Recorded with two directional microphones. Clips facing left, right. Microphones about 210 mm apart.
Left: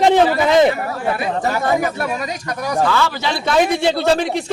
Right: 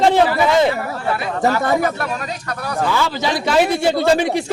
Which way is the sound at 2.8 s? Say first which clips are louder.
Even; 15° right (ahead or behind).